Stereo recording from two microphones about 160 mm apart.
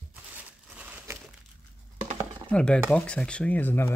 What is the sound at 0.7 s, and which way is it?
Crumpling, 15° right (ahead or behind).